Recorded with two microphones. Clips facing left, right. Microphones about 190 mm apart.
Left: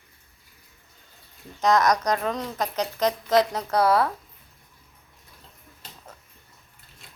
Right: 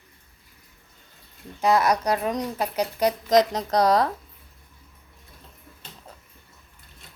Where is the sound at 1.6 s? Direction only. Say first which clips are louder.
Even; 10° right (ahead or behind).